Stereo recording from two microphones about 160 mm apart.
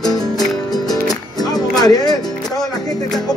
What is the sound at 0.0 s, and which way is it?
Music, 25° left (ahead or behind).